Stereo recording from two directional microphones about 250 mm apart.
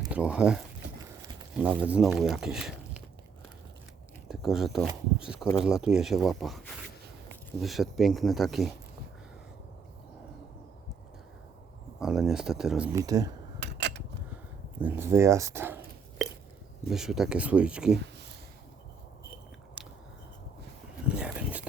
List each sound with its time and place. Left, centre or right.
0.1 s speech: centre
4.3 s speech: centre
7.6 s speech: centre
11.9 s speech: centre
13.6 s a sound: right
14.8 s speech: centre
16.9 s speech: centre
21.2 s a sound: centre